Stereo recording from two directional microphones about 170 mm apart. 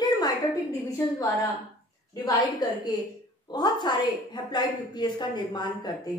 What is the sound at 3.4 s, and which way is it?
A woman's voice, 25° left (ahead or behind).